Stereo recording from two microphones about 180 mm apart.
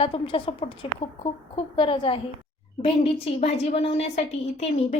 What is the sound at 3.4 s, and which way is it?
A woman's voice, 35° left (ahead or behind).